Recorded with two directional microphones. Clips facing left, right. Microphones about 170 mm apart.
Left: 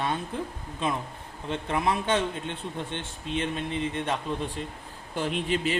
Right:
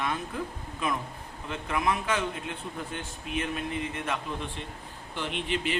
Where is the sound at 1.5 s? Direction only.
30° left (ahead or behind).